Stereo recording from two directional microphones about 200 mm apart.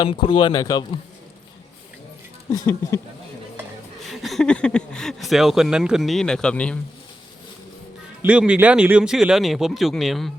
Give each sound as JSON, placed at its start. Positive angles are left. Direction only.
{"t": 0.0, "sound": "speech", "side_deg": 25}
{"t": 2.5, "sound": "speech", "side_deg": 15}
{"t": 4.1, "sound": "speech", "side_deg": 0}
{"t": 8.2, "sound": "speech", "side_deg": -5}